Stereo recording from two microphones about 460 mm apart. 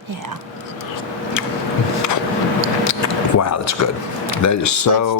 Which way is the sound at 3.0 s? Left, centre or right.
Left.